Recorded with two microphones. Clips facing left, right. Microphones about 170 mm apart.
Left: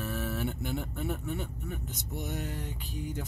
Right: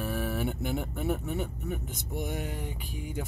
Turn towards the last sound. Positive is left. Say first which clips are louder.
# right 1 dB
turn(degrees=-10)  # may be behind; listen again after turning